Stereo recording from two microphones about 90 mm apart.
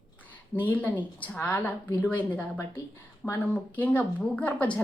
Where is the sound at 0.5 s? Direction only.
20° left (ahead or behind).